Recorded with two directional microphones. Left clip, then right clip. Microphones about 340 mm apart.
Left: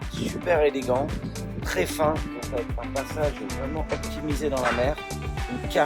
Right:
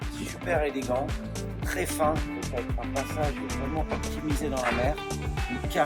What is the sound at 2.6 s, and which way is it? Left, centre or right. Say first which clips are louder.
Speech: left 1 dB; centre.